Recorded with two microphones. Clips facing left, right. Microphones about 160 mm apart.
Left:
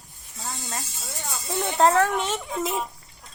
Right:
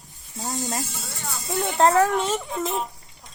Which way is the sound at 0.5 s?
35° right (ahead or behind).